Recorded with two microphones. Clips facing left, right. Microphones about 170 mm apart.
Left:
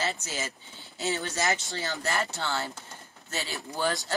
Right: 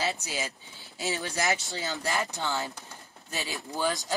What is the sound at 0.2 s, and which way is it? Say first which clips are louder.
Speech: right 1 dB; 10° right (ahead or behind).